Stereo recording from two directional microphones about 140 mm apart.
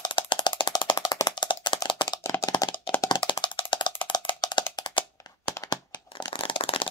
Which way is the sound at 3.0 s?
35° left (ahead or behind).